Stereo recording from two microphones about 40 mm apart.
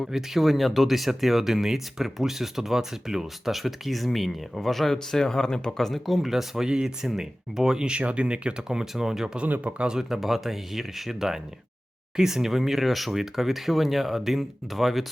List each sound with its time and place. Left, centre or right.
0.1 s speech: centre
4.9 s speech: centre
7.9 s speech: right; by 9.3 s centre
9.5 s speech: right
9.8 s speech: centre
10.2 s speech: centre